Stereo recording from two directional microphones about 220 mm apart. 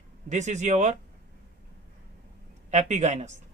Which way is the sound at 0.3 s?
35° right (ahead or behind).